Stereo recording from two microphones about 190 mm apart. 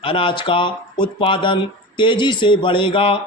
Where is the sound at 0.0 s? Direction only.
30° left (ahead or behind).